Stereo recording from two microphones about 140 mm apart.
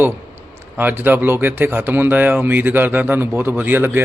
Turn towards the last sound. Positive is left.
turn(degrees=-15)  # may be behind; listen again after turning